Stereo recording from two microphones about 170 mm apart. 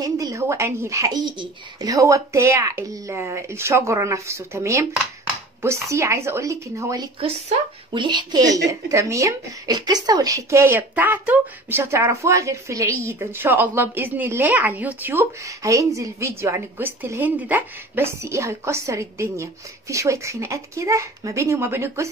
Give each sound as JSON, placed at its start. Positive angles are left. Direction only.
{"t": 0.0, "sound": "a woman's voice", "side_deg": -20}
{"t": 7.2, "sound": "a woman's voice", "side_deg": -35}